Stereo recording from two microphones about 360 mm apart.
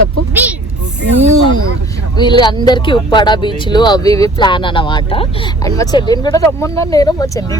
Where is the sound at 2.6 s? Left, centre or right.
Centre.